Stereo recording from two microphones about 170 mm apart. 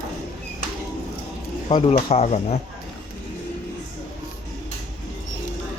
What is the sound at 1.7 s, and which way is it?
Speech, 35° left (ahead or behind).